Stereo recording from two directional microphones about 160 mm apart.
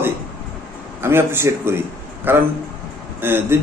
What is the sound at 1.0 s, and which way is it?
A man's voice, 15° right (ahead or behind).